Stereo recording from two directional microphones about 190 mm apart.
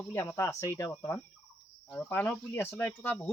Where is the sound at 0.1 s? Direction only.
15° left (ahead or behind).